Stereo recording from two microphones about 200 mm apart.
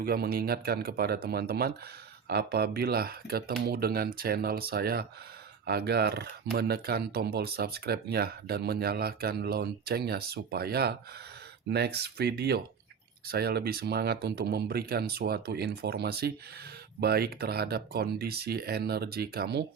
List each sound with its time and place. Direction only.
0.0 s speech: 50° right (ahead or behind)